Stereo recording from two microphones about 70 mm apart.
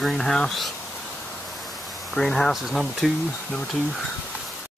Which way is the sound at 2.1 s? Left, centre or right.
Centre.